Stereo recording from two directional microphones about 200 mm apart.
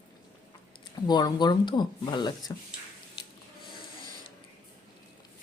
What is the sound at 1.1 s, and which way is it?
Speech, 20° left (ahead or behind).